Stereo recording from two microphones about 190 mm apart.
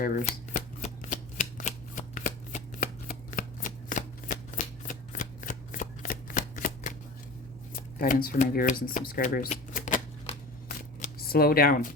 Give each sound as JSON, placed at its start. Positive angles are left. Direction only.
{"t": 0.0, "sound": "shuffling cards", "side_deg": 45}
{"t": 7.9, "sound": "shuffling cards", "side_deg": 50}